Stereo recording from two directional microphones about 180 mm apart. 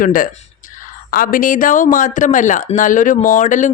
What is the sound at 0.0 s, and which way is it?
A woman's voice, 50° left (ahead or behind).